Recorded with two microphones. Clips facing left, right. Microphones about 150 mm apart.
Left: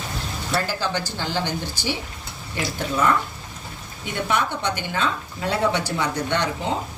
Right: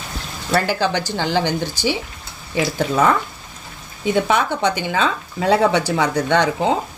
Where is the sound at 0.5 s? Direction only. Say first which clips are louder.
Right 6 dB; 70° right (ahead or behind); by 3.1 s 90° right.